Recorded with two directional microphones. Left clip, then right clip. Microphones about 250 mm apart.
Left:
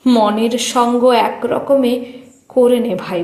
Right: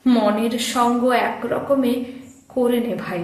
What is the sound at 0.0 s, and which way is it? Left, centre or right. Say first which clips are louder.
A woman's voice: left 5 dB; left.